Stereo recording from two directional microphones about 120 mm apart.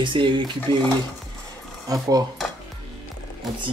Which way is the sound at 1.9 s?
30° right (ahead or behind).